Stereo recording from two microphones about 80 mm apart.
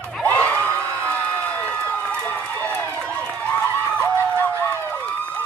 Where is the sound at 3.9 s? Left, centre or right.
Left.